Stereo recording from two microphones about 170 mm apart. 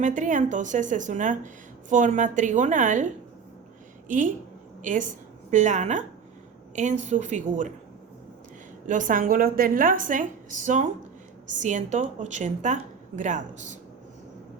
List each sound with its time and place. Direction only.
0.0 s speech: 50° right (ahead or behind)
4.8 s speech: 50° right (ahead or behind)
8.9 s speech: 50° right (ahead or behind)